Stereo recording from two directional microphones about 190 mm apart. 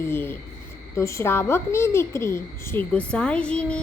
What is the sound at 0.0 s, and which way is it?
Speech, 10° left (ahead or behind).